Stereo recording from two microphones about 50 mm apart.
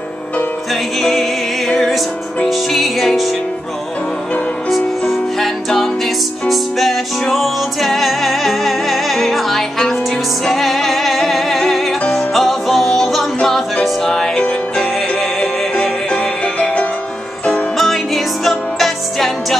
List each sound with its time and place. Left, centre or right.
2.4 s music: centre
4.6 s music: centre
15.4 s music: centre
17.7 s music: centre